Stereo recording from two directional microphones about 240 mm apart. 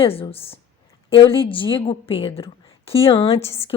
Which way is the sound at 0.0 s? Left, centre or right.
Left.